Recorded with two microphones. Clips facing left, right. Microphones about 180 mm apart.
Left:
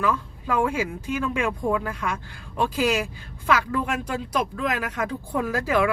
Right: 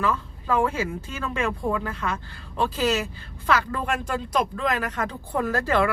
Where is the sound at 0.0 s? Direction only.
10° left (ahead or behind).